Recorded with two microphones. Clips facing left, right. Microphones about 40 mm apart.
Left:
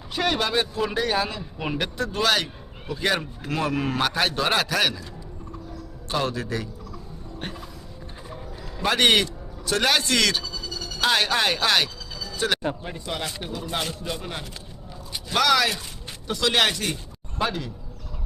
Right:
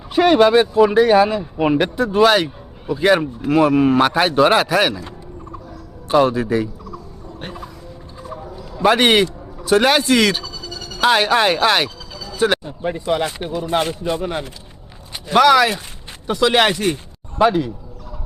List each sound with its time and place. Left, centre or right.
0.1 s speech: right
6.1 s speech: centre
7.3 s music: centre
8.8 s a man's voice: right
10.4 s a sound: centre
11.0 s a man's voice: centre